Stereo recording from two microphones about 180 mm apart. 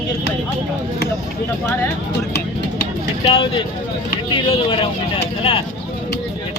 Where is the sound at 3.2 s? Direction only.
25° left (ahead or behind).